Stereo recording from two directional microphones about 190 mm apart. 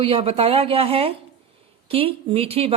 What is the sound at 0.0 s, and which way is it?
A woman's voice, 30° right (ahead or behind).